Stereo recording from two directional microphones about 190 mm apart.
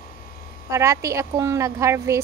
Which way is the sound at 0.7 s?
15° right (ahead or behind).